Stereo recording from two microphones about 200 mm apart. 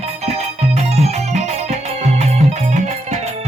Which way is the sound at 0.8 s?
35° right (ahead or behind).